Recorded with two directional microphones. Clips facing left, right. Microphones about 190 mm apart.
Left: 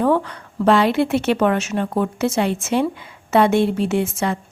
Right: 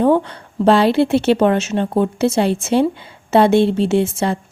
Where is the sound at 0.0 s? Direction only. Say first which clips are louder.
Right 4 dB; 30° right (ahead or behind).